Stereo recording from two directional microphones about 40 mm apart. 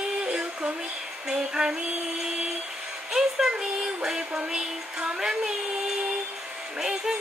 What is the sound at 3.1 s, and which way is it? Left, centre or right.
Music, centre.